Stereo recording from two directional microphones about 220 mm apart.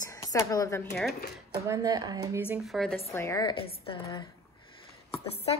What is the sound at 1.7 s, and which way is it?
Speech, 15° right (ahead or behind).